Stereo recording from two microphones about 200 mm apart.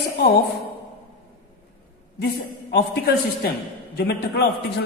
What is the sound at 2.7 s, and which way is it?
A man's voice, 55° left (ahead or behind).